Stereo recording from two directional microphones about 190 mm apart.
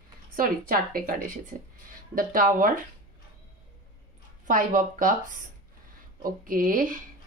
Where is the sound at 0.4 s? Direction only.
50° right (ahead or behind).